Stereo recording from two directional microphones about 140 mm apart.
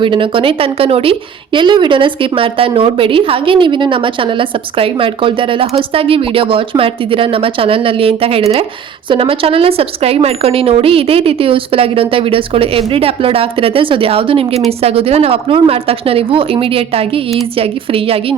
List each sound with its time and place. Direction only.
0.0 s a woman's voice: 35° right (ahead or behind)